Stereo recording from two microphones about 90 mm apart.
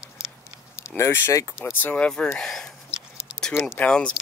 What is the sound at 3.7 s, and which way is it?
Speech, 10° left (ahead or behind).